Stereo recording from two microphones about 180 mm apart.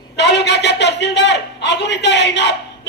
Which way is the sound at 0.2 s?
70° left (ahead or behind).